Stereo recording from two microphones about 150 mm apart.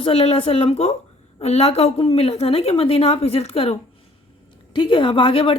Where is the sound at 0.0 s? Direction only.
40° left (ahead or behind).